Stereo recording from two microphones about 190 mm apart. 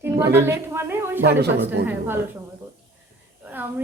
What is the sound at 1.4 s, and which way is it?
Speech, 60° right (ahead or behind).